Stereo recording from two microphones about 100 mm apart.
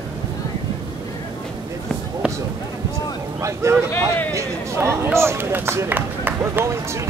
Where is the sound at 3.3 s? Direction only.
30° right (ahead or behind).